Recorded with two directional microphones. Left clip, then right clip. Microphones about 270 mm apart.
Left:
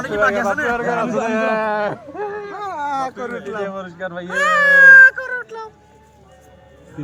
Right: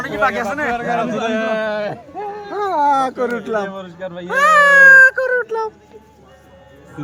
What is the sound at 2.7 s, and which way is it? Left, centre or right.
Speech, right.